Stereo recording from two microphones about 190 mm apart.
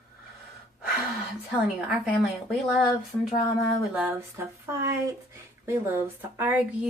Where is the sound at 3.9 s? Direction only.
10° right (ahead or behind).